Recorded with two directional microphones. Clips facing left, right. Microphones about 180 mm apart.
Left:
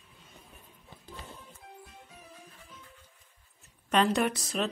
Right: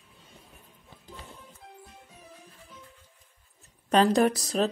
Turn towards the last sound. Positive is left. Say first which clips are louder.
# right 6 dB
turn(degrees=-35)  # may be behind; listen again after turning